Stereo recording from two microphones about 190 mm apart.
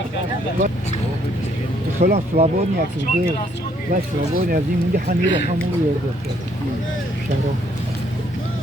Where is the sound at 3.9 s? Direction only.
50° right (ahead or behind).